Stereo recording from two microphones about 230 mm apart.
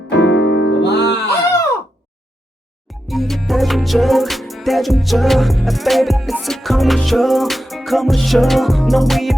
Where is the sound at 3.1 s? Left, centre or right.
Centre.